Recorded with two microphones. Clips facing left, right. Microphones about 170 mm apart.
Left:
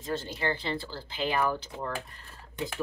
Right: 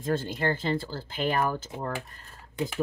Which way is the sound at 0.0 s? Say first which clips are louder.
Right 4 dB; 50° right (ahead or behind).